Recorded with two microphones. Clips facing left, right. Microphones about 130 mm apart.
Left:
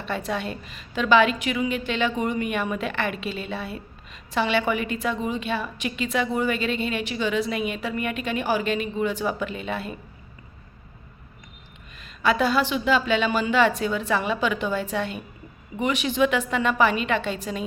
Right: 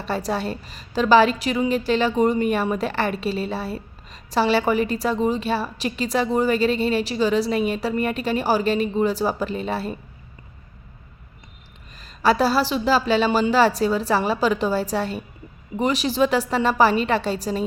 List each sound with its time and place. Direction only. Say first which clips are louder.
0.0 s a woman's voice: right 3 dB; 35° right (ahead or behind)
11.9 s a woman's voice: right 3 dB; 35° right (ahead or behind)